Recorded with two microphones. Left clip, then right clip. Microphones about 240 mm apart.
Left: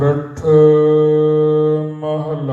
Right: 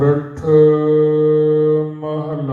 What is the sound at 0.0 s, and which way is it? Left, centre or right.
Mantra, left.